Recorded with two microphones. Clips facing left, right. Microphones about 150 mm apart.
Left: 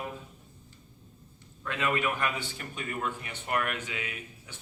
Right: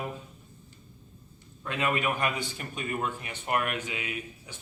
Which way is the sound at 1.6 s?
15° right (ahead or behind).